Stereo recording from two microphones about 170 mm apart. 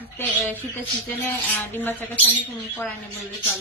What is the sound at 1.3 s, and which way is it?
A woman's voice, 10° left (ahead or behind).